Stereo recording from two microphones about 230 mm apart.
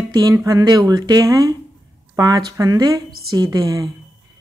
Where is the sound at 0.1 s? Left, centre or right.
Centre.